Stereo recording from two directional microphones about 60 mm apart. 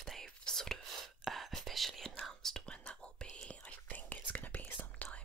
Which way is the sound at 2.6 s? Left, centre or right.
Centre.